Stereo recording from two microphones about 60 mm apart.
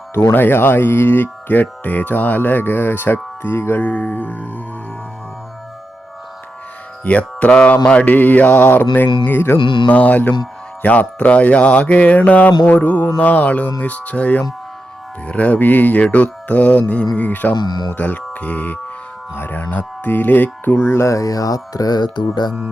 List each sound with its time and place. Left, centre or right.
0.1 s speech: left
3.8 s speech: left
7.0 s mantra: left
7.9 s speech: left
9.9 s speech: left